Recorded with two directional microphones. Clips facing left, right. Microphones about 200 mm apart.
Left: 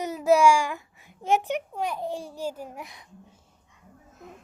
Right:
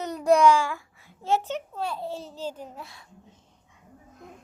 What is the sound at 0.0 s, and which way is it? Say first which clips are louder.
A child's voice: even; 5° left (ahead or behind).